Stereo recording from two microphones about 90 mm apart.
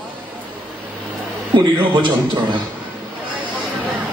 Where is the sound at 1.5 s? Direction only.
65° right (ahead or behind).